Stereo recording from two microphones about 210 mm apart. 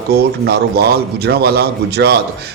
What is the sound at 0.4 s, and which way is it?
A man's voice, 50° right (ahead or behind).